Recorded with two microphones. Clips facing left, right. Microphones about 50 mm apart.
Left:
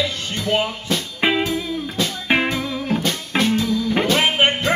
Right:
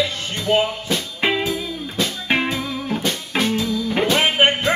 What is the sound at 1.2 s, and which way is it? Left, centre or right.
Music, centre.